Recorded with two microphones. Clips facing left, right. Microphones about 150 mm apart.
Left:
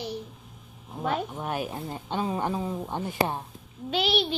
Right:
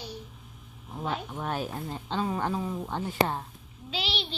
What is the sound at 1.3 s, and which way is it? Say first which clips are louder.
Speech: left 1 dB; 15° left (ahead or behind).